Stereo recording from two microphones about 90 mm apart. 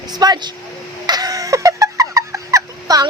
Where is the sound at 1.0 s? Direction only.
45° right (ahead or behind).